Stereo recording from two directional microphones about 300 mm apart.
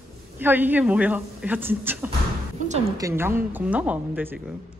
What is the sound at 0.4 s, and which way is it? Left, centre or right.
Speech, centre.